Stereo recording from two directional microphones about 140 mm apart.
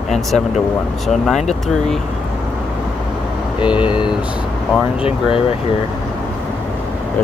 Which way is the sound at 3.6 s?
35° left (ahead or behind).